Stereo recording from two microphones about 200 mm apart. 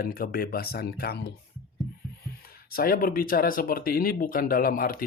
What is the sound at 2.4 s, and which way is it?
Speech, 50° left (ahead or behind).